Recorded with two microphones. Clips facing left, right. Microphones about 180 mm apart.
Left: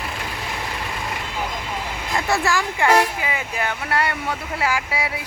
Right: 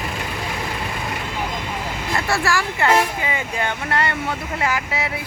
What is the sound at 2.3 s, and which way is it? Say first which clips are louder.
Speech: left 1 dB; 20° left (ahead or behind).